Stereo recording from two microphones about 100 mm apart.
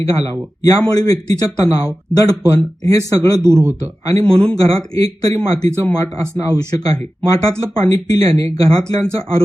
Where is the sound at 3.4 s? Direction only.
25° right (ahead or behind).